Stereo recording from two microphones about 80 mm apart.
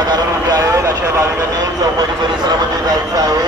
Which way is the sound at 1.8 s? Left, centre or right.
Right.